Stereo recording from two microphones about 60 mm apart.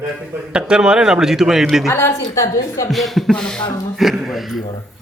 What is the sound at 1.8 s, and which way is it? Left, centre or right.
A woman's voice, left.